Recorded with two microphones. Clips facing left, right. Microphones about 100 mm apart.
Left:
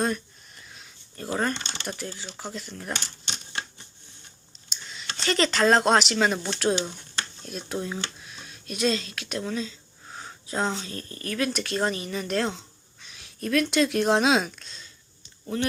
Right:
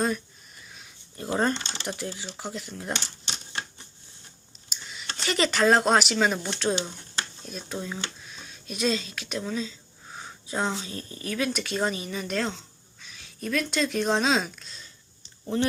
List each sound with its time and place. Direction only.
0.0 s a sound: centre (ahead or behind)
1.1 s speech: 20° right (ahead or behind)
4.7 s speech: 5° right (ahead or behind)